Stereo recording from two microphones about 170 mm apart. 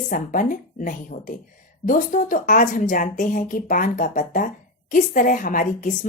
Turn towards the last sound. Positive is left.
turn(degrees=50)  # may be behind; listen again after turning